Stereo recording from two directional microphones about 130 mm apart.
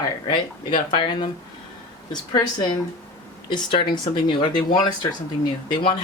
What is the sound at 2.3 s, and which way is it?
Speech, 35° left (ahead or behind).